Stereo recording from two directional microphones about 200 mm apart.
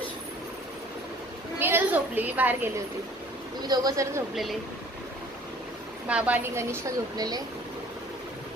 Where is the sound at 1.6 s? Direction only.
10° right (ahead or behind).